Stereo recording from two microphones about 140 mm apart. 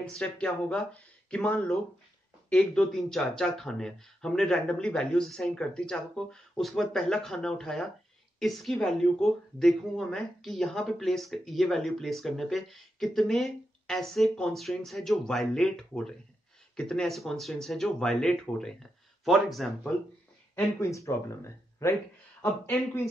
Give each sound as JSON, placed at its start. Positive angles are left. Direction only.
{"t": 0.0, "sound": "speech", "side_deg": 5}
{"t": 20.9, "sound": "speech", "side_deg": 20}